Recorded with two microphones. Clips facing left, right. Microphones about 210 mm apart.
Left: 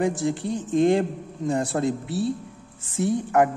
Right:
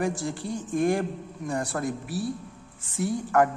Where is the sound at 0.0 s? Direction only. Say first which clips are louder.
Left 5 dB; 20° left (ahead or behind).